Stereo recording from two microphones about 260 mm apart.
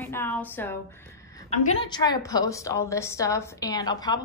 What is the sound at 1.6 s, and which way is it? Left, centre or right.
A woman's voice, left.